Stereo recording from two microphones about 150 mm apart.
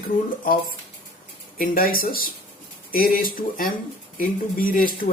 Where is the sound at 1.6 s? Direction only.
75° left (ahead or behind).